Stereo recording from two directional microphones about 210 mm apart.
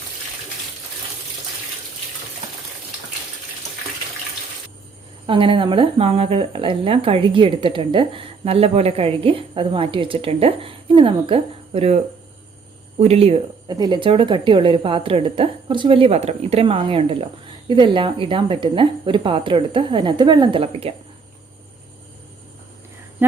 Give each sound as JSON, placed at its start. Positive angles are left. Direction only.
{"t": 5.2, "sound": "speech", "side_deg": -25}